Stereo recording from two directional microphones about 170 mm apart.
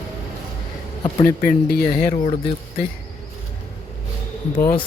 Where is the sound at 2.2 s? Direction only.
35° left (ahead or behind).